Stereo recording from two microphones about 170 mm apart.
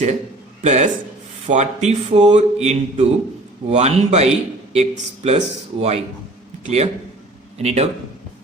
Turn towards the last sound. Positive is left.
turn(degrees=-40)  # may be behind; listen again after turning